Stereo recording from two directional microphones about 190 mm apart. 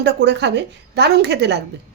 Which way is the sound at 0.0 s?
65° right (ahead or behind).